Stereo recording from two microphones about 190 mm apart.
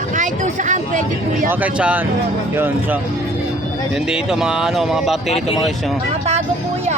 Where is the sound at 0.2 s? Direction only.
40° right (ahead or behind).